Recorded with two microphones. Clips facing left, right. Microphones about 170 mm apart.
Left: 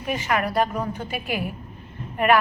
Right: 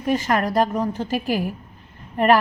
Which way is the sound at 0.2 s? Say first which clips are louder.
Right 3 dB; 40° right (ahead or behind).